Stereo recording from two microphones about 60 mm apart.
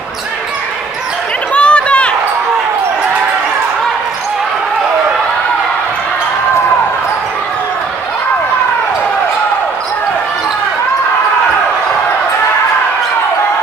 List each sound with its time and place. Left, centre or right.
1.5 s chatter: centre